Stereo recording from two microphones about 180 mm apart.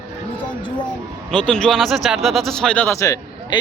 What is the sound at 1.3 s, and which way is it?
A man's voice, 5° left (ahead or behind).